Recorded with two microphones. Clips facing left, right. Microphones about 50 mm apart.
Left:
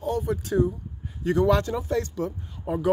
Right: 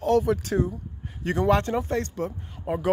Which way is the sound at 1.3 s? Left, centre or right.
Right.